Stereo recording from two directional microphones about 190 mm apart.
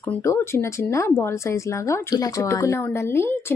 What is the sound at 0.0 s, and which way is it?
A woman's voice, 15° left (ahead or behind).